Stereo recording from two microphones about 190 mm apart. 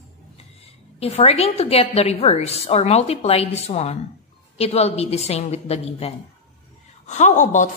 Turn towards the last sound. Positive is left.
turn(degrees=40)  # may be behind; listen again after turning